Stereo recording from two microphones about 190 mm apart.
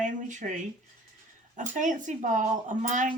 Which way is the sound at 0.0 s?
40° right (ahead or behind).